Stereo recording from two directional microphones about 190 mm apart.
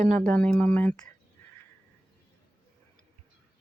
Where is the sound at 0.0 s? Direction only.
40° right (ahead or behind).